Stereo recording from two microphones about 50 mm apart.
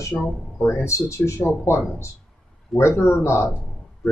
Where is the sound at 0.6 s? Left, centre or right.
Left.